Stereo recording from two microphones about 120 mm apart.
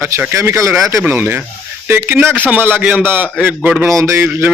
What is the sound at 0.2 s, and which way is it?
A man's voice, 20° right (ahead or behind).